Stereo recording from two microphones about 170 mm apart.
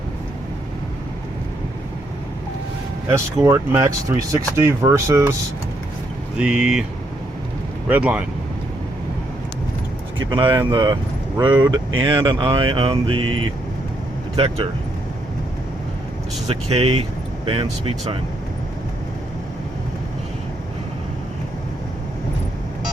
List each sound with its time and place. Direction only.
3.1 s speech: 15° right (ahead or behind)
6.3 s speech: 5° right (ahead or behind)
7.9 s speech: 10° right (ahead or behind)
10.2 s speech: 25° right (ahead or behind)
14.3 s speech: 35° right (ahead or behind)
16.5 s speech: 40° right (ahead or behind)